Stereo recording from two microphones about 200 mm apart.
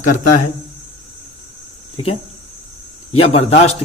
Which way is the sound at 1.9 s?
30° left (ahead or behind).